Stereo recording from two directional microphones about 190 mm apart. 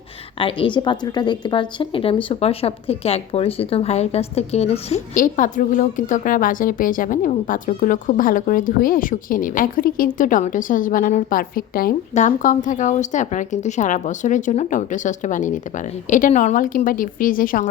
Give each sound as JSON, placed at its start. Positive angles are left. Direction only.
{"t": 0.3, "sound": "a woman's voice", "side_deg": 25}